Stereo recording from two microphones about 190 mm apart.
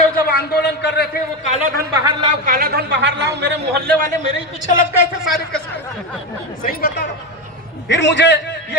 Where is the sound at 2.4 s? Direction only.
50° right (ahead or behind).